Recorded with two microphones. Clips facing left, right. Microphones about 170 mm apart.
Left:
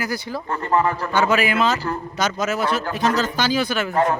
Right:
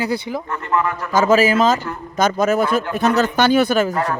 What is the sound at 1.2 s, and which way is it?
Speech, 40° right (ahead or behind).